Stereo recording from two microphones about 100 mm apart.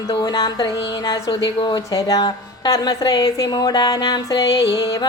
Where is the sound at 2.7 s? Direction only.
45° left (ahead or behind).